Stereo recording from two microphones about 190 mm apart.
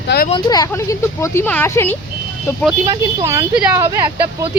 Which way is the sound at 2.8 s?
20° right (ahead or behind).